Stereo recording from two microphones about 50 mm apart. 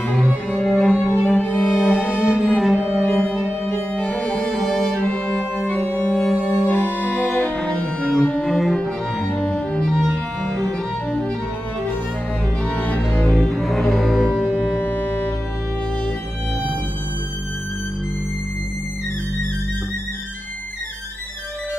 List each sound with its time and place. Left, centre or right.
0.1 s cello: centre
1.5 s music: centre
3.9 s music: left
4.2 s music: centre
4.5 s music: centre
6.7 s music: left
8.0 s cello: centre
9.5 s cello: centre
10.4 s music: centre
11.1 s music: left
12.6 s music: left
13.5 s music: centre
14.5 s music: left